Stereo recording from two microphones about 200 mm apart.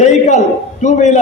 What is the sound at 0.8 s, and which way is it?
Speech, 35° left (ahead or behind).